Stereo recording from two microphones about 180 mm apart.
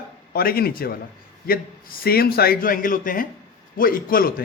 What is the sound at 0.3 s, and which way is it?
A man's voice, 55° left (ahead or behind).